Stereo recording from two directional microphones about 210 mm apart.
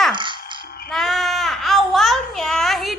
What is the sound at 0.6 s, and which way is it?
Music, 45° left (ahead or behind).